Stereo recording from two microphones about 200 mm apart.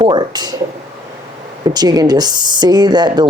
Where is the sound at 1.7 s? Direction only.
20° right (ahead or behind).